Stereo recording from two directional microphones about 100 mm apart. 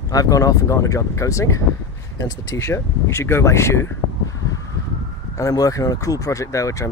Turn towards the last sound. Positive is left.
turn(degrees=30)  # may be behind; listen again after turning